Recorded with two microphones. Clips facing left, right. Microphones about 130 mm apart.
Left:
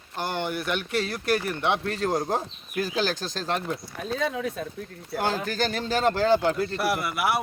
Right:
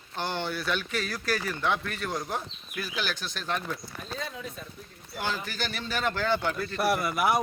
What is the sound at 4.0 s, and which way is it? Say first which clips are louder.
Speech: left 9 dB; 70° left (ahead or behind).